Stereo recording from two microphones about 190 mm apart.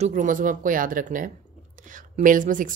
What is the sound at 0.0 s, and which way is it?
Speech, 40° right (ahead or behind).